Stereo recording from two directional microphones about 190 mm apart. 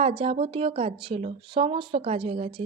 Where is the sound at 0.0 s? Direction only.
30° right (ahead or behind).